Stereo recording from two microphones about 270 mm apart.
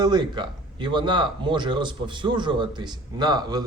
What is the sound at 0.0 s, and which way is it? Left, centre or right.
Speech, centre.